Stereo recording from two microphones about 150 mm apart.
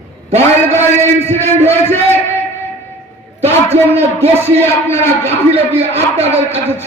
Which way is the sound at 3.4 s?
45° right (ahead or behind).